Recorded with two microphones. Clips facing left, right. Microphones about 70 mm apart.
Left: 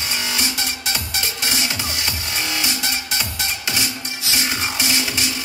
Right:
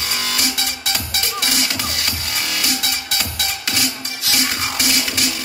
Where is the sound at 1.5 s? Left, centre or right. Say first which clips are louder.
Right 1 dB; left.